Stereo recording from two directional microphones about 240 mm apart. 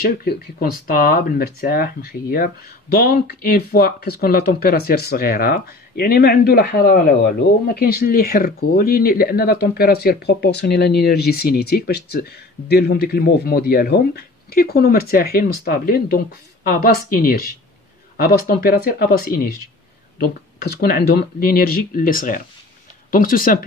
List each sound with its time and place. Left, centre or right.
0.0 s speech: left